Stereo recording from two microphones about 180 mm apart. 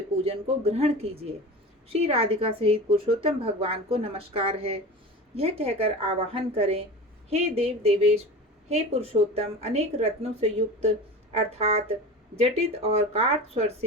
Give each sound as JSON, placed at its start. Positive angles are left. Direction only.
{"t": 0.2, "sound": "a woman's voice", "side_deg": -35}